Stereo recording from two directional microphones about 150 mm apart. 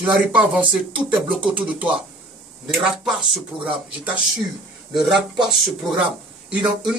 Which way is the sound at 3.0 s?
5° right (ahead or behind).